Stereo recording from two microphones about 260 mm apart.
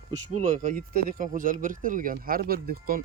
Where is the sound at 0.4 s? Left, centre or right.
Right.